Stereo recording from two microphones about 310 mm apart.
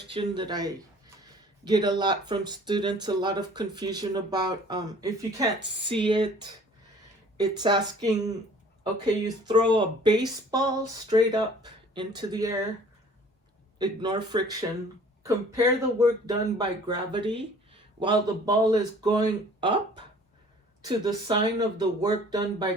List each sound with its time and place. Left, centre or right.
0.1 s speech: centre
7.3 s speech: centre
13.7 s speech: centre
20.8 s speech: centre